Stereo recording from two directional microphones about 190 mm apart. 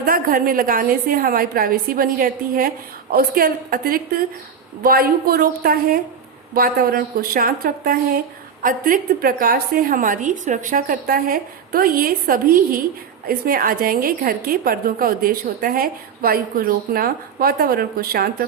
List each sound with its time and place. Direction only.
0.0 s a woman's voice: 50° right (ahead or behind)